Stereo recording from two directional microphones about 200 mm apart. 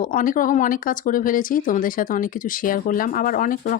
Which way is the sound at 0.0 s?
45° left (ahead or behind).